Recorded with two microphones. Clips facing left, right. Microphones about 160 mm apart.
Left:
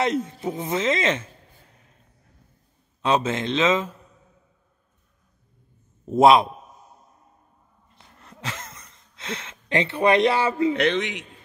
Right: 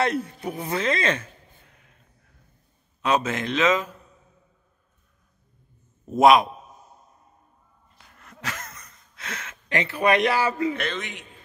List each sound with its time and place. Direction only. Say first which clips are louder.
0.0 s speech: left 1 dB; 20° left (ahead or behind)
3.0 s speech: left 1 dB; 25° left (ahead or behind)
6.0 s speech: left 1 dB; 30° left (ahead or behind)
7.9 s a sound: left 1 dB; 25° left (ahead or behind)
10.8 s a man's voice: left 8 dB; 70° left (ahead or behind)